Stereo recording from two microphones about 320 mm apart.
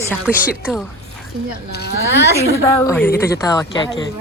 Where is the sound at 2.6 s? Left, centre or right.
Centre.